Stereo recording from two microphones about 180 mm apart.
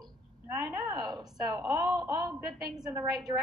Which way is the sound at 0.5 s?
15° right (ahead or behind).